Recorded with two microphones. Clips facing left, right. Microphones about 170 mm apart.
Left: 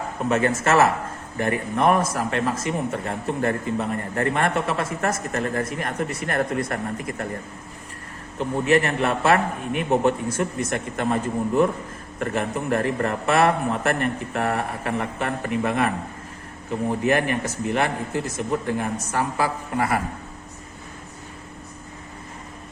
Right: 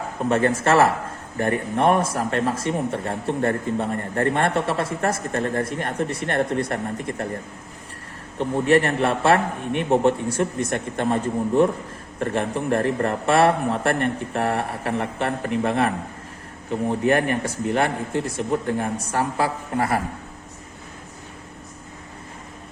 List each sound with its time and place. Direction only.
0.3 s speech: 35° right (ahead or behind)
8.4 s speech: 35° right (ahead or behind)
17.0 s speech: 30° right (ahead or behind)